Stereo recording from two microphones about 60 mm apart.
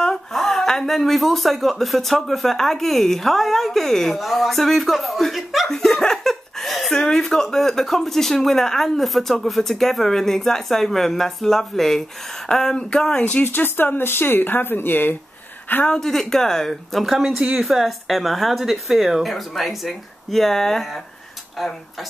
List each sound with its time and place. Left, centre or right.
0.0 s speech: centre
5.7 s speech: centre
13.2 s speech: left
16.0 s speech: centre